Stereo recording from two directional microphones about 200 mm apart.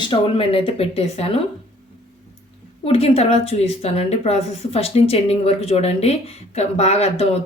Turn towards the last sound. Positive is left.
turn(degrees=30)  # may be behind; listen again after turning